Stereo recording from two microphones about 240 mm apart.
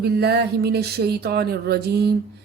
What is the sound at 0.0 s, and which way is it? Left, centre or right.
Speech, right.